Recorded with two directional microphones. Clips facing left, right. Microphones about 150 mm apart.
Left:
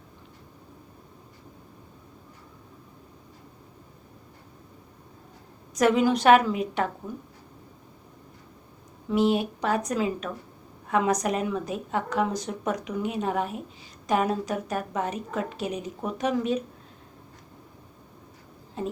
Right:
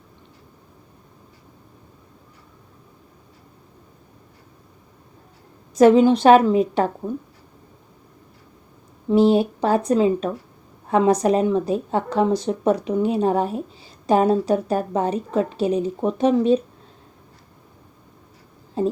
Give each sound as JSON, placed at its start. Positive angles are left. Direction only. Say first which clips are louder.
{"t": 5.7, "sound": "speech", "louder": "right 8 dB", "side_deg": -30}
{"t": 9.0, "sound": "speech", "louder": "right 7 dB", "side_deg": -30}
{"t": 18.8, "sound": "speech", "louder": "right 10 dB", "side_deg": -30}